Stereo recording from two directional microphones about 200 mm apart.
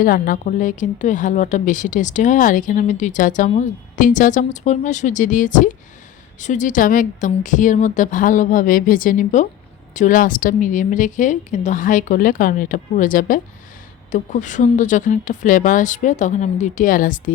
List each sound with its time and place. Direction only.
0.0 s a woman's voice: 40° left (ahead or behind)